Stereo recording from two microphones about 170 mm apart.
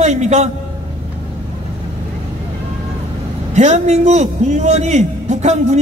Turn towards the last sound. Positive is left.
turn(degrees=-40)  # may be behind; listen again after turning